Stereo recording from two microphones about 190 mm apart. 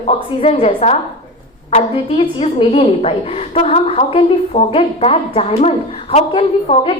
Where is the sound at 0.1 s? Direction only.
35° left (ahead or behind).